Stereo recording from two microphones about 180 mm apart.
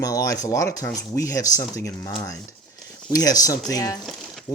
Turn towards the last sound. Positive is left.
turn(degrees=0)  # may be behind; listen again after turning